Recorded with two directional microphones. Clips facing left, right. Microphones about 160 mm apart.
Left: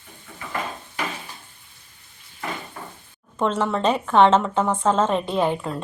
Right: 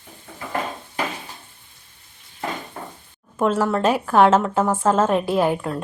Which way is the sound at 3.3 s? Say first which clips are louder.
Right 3 dB; 5° right (ahead or behind).